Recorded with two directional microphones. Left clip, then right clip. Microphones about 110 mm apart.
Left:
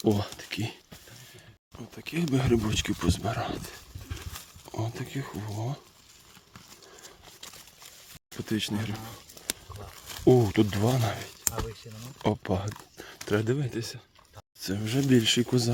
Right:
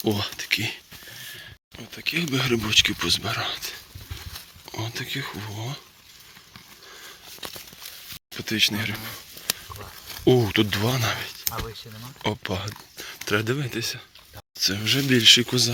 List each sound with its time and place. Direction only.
0.0 s speech: 60° left (ahead or behind)
2.0 s speech: 60° left (ahead or behind)
4.6 s speech: 50° left (ahead or behind)
5.5 s speech: 60° left (ahead or behind)
8.3 s speech: 50° left (ahead or behind)
8.8 s speech: 30° left (ahead or behind)
10.1 s a sound: 40° left (ahead or behind)
10.5 s speech: 30° left (ahead or behind)
12.2 s speech: 55° left (ahead or behind)
13.6 s speech: 20° left (ahead or behind)
14.6 s speech: 30° left (ahead or behind)
15.2 s speech: 40° left (ahead or behind)